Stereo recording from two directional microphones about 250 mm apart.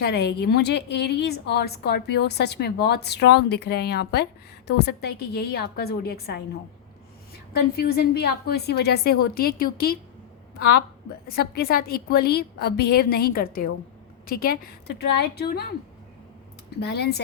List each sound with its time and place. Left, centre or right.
0.0 s a woman's voice: left
7.8 s a woman's voice: left
11.3 s a woman's voice: left
16.8 s a woman's voice: left